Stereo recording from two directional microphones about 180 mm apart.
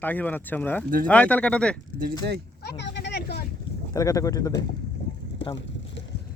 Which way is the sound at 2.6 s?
70° left (ahead or behind).